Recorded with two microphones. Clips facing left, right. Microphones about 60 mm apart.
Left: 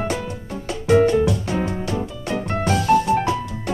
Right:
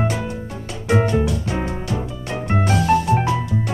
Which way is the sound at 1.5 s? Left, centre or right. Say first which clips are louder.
Left 1 dB; centre.